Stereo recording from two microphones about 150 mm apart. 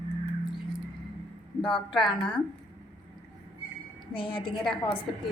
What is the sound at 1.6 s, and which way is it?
Speech, 35° left (ahead or behind).